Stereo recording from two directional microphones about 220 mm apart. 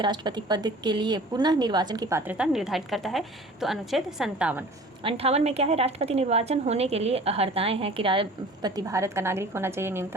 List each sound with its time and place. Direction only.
0.0 s speech: 20° right (ahead or behind)
5.0 s a woman's voice: 25° right (ahead or behind); by 10.2 s 10° right (ahead or behind)